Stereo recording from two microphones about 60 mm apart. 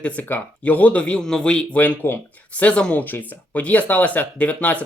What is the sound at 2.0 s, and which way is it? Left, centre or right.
Speech, left.